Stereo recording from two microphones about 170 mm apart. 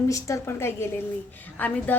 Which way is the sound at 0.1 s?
20° left (ahead or behind).